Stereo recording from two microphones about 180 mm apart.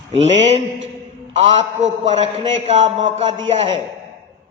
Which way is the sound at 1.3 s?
35° right (ahead or behind).